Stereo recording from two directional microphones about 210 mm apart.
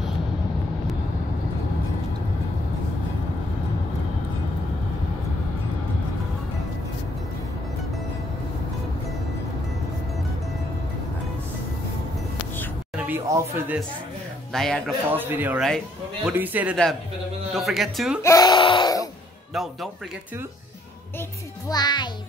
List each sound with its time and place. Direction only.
12.9 s a sound: 10° right (ahead or behind)
14.5 s speech: centre (ahead or behind)
15.0 s speech: 10° right (ahead or behind)
18.2 s a sound: 15° left (ahead or behind)
19.5 s speech: centre (ahead or behind)
21.6 s a child's voice: 20° left (ahead or behind)